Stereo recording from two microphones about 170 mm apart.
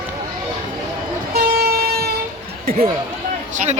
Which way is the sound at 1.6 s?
65° right (ahead or behind).